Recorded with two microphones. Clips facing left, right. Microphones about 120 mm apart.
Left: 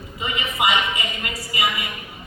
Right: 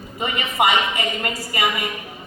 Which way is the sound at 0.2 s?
50° right (ahead or behind).